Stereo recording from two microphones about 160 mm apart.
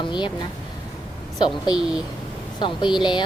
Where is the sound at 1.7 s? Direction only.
5° right (ahead or behind).